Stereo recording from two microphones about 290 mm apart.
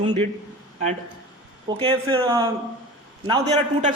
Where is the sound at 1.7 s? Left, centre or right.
Centre.